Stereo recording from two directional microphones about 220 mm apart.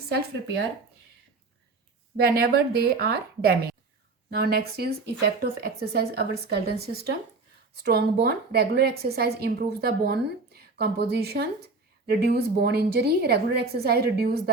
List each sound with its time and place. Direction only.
0.1 s a woman's voice: 45° right (ahead or behind)
2.2 s a woman's voice: 45° right (ahead or behind)